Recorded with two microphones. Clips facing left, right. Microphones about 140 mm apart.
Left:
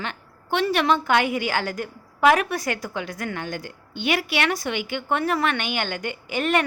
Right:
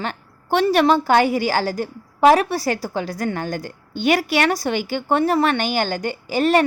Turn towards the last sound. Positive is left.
turn(degrees=-35)  # may be behind; listen again after turning